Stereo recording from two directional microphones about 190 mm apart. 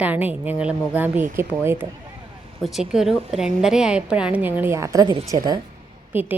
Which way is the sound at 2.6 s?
Centre (ahead or behind).